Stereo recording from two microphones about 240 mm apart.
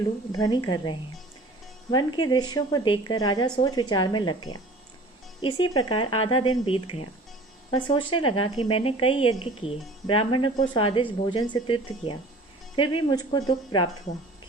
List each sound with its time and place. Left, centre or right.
0.3 s a woman's voice: centre